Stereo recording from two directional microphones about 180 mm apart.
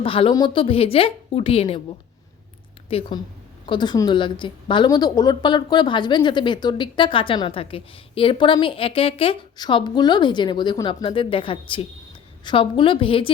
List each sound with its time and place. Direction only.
0.0 s a woman's voice: 30° left (ahead or behind)
2.9 s a woman's voice: 30° left (ahead or behind)